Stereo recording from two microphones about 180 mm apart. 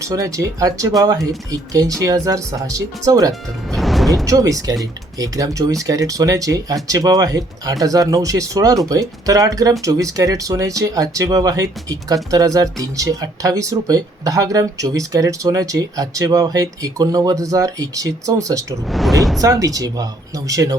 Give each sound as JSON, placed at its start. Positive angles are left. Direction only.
{"t": 0.0, "sound": "speech", "side_deg": -20}
{"t": 3.7, "sound": "music", "side_deg": 0}
{"t": 4.3, "sound": "speech", "side_deg": -20}
{"t": 18.9, "sound": "speech", "side_deg": 0}
{"t": 19.4, "sound": "speech", "side_deg": -20}